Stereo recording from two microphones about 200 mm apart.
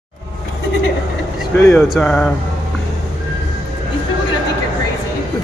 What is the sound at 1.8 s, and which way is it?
Speech, 5° left (ahead or behind).